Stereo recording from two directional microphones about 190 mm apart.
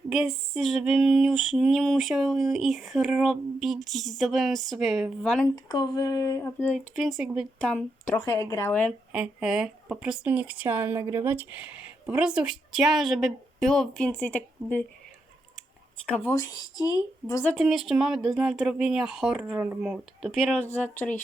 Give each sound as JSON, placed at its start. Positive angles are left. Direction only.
{"t": 0.1, "sound": "speech", "side_deg": -5}
{"t": 5.5, "sound": "speech", "side_deg": 20}
{"t": 8.1, "sound": "speech", "side_deg": 15}
{"t": 9.1, "sound": "speech", "side_deg": -5}
{"t": 16.1, "sound": "speech", "side_deg": 10}
{"t": 17.5, "sound": "speech", "side_deg": 0}